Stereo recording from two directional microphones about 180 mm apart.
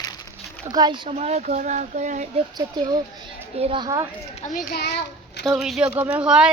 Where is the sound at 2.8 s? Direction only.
20° right (ahead or behind).